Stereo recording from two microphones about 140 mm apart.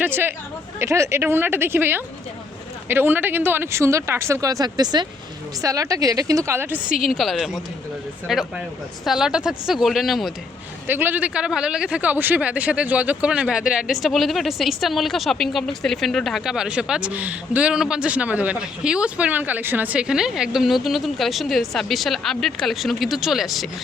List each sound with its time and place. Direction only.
0.0 s speech: 15° right (ahead or behind)
6.9 s speech: centre (ahead or behind)
10.8 s speech: 15° right (ahead or behind)